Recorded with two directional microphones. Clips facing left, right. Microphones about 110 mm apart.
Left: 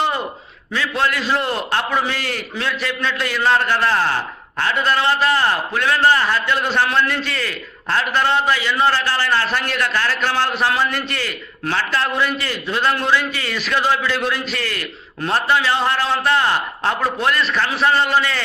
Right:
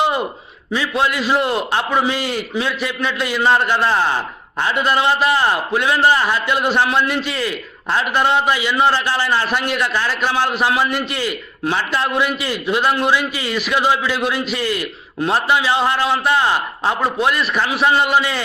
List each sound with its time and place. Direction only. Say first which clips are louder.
0.7 s a man's voice: right 2 dB; 10° right (ahead or behind)